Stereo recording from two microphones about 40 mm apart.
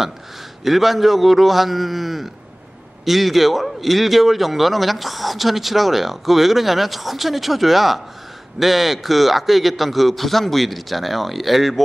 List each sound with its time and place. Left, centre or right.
0.7 s a man's voice: centre